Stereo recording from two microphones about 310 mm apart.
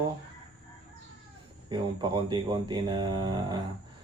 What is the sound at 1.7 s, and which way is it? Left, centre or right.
Speech, centre.